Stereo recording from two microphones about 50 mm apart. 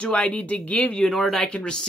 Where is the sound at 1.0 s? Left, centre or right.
Centre.